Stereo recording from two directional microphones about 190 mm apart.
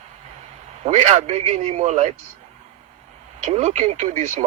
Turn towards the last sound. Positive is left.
turn(degrees=-35)  # may be behind; listen again after turning